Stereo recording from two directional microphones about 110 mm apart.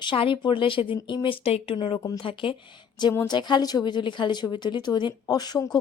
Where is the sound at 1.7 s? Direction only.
45° left (ahead or behind).